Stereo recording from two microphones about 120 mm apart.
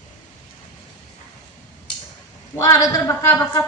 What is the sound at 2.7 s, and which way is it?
Speech, 25° left (ahead or behind).